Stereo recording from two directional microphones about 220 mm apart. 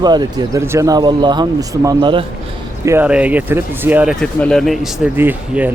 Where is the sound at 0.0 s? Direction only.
20° right (ahead or behind).